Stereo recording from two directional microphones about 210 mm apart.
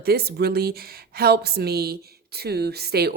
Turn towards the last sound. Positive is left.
turn(degrees=-50)  # may be behind; listen again after turning